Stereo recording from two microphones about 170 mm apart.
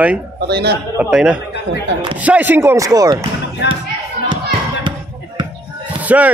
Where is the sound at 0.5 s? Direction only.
70° right (ahead or behind).